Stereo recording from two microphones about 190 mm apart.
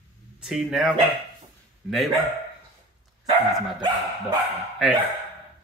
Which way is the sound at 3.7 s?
20° right (ahead or behind).